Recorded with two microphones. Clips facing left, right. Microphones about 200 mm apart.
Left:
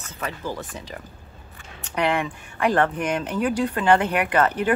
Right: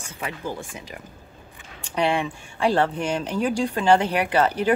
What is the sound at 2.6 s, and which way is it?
Speech, 30° right (ahead or behind).